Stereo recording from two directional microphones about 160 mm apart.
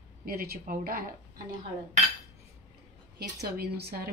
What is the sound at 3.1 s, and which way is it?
Speech, 90° right.